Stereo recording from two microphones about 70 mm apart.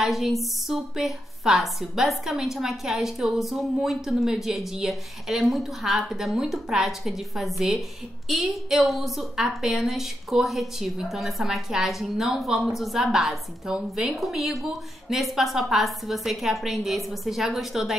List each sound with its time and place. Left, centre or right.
0.0 s a woman's voice: centre